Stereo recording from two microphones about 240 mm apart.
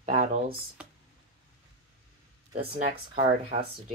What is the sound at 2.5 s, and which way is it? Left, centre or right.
Speech, right.